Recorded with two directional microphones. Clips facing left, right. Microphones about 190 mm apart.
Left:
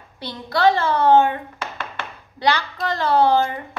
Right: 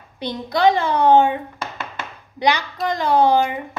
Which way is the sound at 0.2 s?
15° right (ahead or behind).